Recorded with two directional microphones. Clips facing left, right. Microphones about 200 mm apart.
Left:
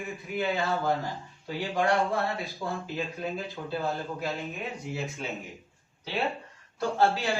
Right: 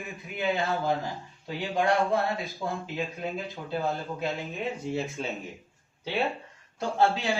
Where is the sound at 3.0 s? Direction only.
15° right (ahead or behind).